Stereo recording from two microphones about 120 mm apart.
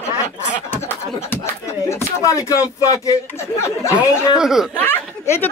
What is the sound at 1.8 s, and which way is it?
Speech, 25° left (ahead or behind).